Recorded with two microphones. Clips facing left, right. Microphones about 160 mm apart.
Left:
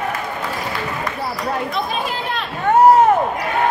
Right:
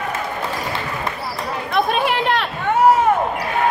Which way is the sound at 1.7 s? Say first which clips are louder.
Right 5 dB; 65° right (ahead or behind).